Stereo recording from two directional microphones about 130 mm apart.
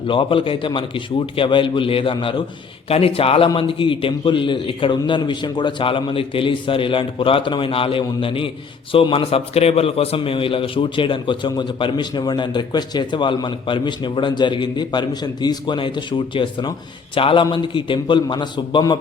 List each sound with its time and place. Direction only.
0.1 s a man's voice: 40° left (ahead or behind)